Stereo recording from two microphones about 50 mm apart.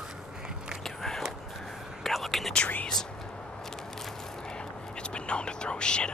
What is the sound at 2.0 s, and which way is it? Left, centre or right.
Whispering, centre.